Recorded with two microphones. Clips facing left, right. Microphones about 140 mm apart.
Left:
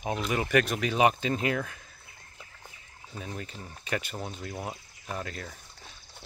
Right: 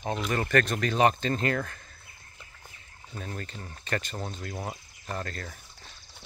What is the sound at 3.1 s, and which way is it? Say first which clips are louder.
Speech: right 1 dB; 5° left (ahead or behind).